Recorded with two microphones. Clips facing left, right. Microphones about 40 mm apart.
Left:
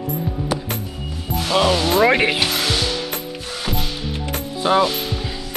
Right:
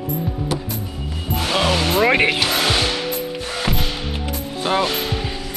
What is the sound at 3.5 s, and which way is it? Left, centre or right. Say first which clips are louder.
Mechanisms: right 1 dB; right.